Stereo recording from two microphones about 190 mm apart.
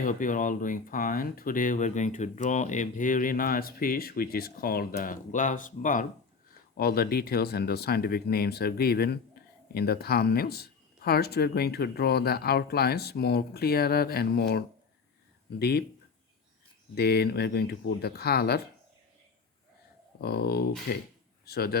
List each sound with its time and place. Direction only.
0.0 s speech: 45° left (ahead or behind)
6.7 s speech: 55° left (ahead or behind)
16.9 s speech: 60° left (ahead or behind)
20.2 s a man's voice: 55° left (ahead or behind)